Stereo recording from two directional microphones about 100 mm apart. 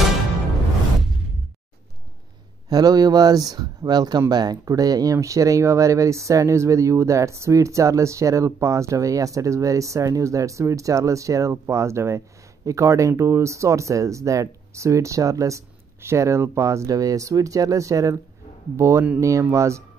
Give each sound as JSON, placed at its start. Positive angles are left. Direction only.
{"t": 2.7, "sound": "speech", "side_deg": -40}